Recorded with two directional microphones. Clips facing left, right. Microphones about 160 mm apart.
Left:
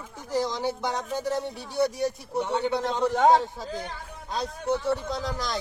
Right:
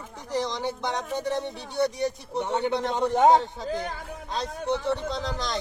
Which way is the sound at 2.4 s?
15° right (ahead or behind).